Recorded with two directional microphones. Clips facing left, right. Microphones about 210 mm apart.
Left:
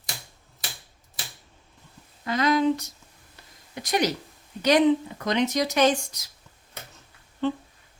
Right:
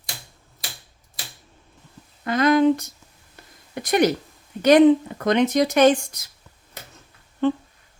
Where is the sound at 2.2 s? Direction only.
55° right (ahead or behind).